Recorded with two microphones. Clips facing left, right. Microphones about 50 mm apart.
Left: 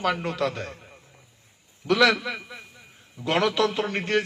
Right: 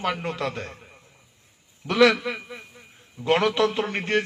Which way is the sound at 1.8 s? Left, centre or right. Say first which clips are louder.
Right 2 dB; right.